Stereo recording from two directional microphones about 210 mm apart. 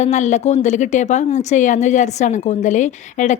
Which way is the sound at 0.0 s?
35° left (ahead or behind).